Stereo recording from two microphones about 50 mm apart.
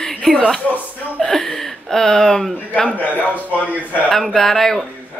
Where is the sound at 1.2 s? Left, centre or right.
Centre.